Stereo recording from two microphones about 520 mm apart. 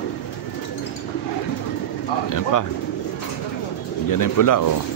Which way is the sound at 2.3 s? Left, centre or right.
Left.